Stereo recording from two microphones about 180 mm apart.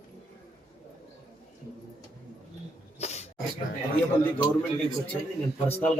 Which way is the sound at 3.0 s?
40° left (ahead or behind).